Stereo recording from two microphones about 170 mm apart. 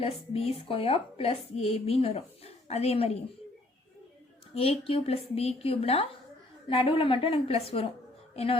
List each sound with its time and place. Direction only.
0.0 s a woman's voice: 35° left (ahead or behind)
4.5 s a woman's voice: 35° left (ahead or behind)